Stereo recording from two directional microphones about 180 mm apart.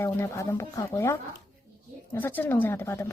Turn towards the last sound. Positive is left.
turn(degrees=15)  # may be behind; listen again after turning